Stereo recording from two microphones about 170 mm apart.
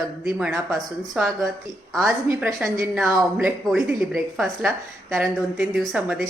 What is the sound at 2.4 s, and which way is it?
Speech, 15° right (ahead or behind).